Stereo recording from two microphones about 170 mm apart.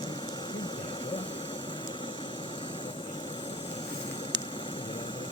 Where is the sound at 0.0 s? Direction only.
25° left (ahead or behind).